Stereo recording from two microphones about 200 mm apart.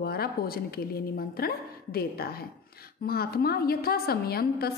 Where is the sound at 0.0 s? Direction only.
50° left (ahead or behind).